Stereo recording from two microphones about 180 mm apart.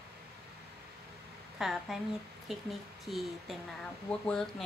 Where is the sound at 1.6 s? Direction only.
Centre (ahead or behind).